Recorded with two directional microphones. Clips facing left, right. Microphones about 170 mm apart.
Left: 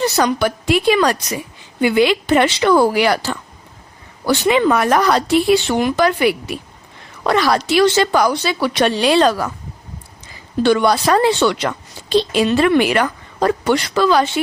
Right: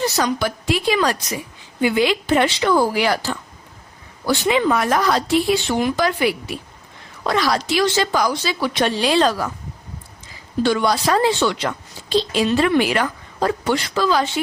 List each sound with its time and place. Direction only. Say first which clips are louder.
0.0 s a woman's voice: left 4 dB; 65° left (ahead or behind)
10.6 s a woman's voice: left 4 dB; 65° left (ahead or behind)